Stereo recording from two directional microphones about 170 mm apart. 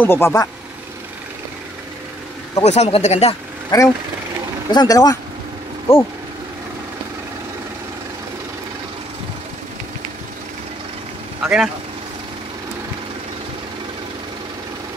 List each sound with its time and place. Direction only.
0.0 s speech: 15° left (ahead or behind)
2.6 s speech: 40° left (ahead or behind)
3.7 s speech: 25° left (ahead or behind)
5.9 s speech: 35° left (ahead or behind)
11.4 s speech: 5° right (ahead or behind)